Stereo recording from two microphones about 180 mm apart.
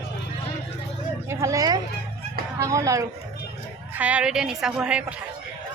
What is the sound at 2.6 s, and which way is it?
Speech, 20° right (ahead or behind).